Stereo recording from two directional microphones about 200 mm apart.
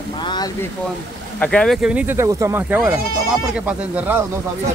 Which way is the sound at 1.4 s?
5° left (ahead or behind).